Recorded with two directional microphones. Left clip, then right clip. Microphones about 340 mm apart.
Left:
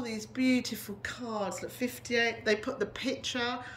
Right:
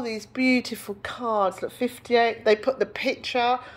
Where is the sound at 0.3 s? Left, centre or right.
Centre.